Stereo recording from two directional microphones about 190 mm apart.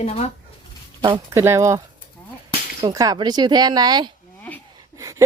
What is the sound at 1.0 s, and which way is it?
Speech, 15° right (ahead or behind).